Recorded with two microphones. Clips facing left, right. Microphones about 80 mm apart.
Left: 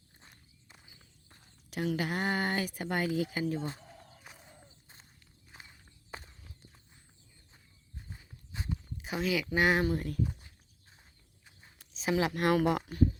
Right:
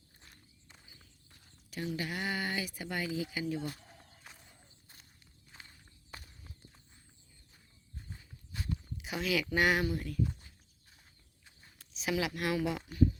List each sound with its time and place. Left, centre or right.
0.7 s walk: centre
1.7 s speech: left
3.5 s speech: left
4.3 s horse: centre
5.5 s walk: left
6.1 s clip-clop: left
7.9 s horse: centre
9.0 s speech: left
11.4 s walk: centre
11.9 s speech: left